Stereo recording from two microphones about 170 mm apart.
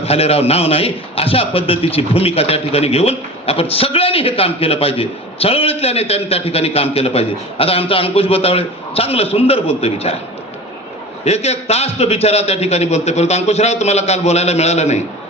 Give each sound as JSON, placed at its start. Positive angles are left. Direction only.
{"t": 0.0, "sound": "a man's voice", "side_deg": 35}
{"t": 11.3, "sound": "a man's voice", "side_deg": 40}